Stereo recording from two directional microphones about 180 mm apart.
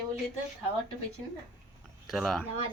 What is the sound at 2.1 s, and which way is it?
Speech, centre (ahead or behind).